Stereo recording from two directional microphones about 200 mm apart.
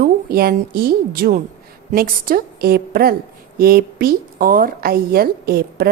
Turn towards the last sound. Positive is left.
turn(degrees=-50)  # may be behind; listen again after turning